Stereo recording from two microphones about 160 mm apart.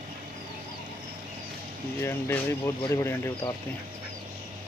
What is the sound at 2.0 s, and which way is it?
Speech, 15° left (ahead or behind).